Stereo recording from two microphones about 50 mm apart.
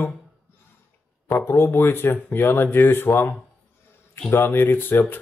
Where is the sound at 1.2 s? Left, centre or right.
Left.